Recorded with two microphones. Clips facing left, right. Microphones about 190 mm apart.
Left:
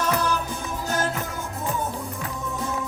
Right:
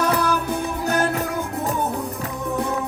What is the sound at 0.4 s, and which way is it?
Music, 60° right (ahead or behind).